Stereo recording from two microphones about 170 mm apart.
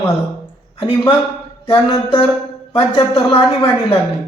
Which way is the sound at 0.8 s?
30° left (ahead or behind).